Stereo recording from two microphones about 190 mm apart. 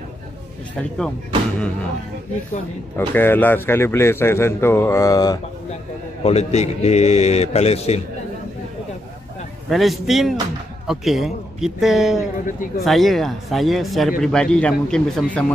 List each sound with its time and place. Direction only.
0.7 s speech: 5° left (ahead or behind)
3.0 s a man's voice: 10° left (ahead or behind)
6.2 s a man's voice: 35° left (ahead or behind)
9.7 s speech: centre (ahead or behind)
12.4 s speech: 45° left (ahead or behind)
12.8 s speech: centre (ahead or behind)